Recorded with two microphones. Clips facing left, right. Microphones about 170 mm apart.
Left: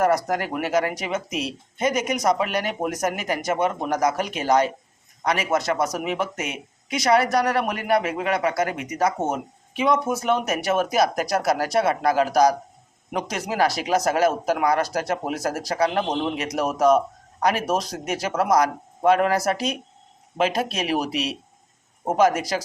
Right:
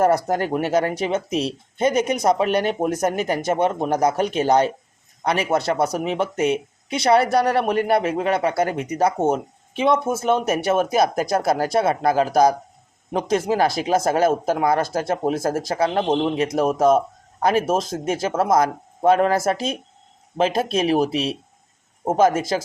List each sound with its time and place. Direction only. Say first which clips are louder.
0.3 s speech: right 4 dB; 30° right (ahead or behind)